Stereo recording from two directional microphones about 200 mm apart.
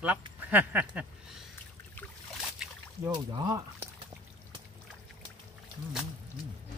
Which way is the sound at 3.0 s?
20° right (ahead or behind).